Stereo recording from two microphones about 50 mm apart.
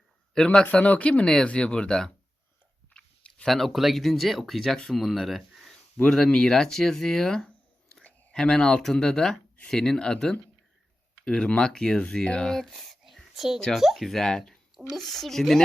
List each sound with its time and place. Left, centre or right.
0.3 s speech: centre
1.2 s speech: centre
2.9 s a sound: left
3.4 s speech: centre
6.2 s speech: centre